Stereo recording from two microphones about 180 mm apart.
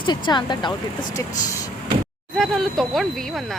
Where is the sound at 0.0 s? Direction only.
25° left (ahead or behind).